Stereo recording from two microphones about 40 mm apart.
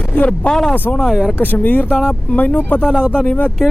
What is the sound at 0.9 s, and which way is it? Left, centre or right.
Speech, left.